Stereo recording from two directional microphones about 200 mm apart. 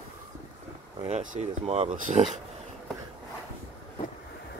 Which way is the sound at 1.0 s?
35° right (ahead or behind).